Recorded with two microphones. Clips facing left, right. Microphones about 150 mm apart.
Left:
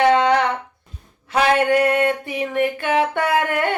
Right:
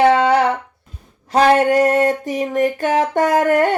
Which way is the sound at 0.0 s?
40° right (ahead or behind).